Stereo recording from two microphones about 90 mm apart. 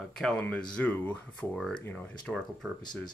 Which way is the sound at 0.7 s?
20° left (ahead or behind).